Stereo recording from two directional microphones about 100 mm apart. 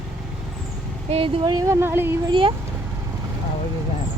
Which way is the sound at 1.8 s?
20° right (ahead or behind).